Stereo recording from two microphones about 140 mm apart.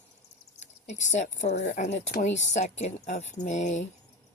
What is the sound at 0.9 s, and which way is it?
Speech, 55° left (ahead or behind).